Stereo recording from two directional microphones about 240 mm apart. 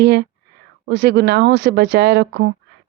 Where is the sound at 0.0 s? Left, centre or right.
Right.